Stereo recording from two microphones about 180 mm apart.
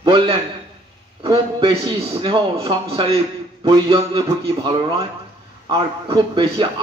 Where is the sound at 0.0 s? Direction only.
25° right (ahead or behind).